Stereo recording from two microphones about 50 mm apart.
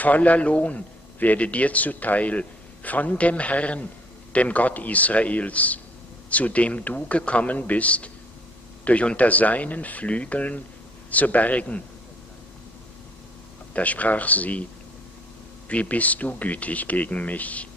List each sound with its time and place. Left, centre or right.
0.0 s a man's voice: left
13.7 s speech: left
15.7 s speech: left